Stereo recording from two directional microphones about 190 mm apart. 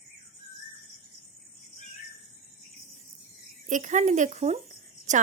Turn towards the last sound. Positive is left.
turn(degrees=-40)  # may be behind; listen again after turning